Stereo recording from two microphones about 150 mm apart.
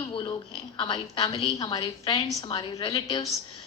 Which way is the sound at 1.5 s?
25° left (ahead or behind).